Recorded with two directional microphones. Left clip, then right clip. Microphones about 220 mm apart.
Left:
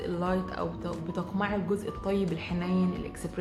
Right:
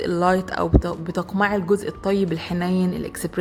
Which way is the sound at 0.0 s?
45° right (ahead or behind).